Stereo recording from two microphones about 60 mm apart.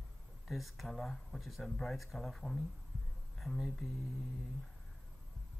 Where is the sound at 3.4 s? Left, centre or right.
Centre.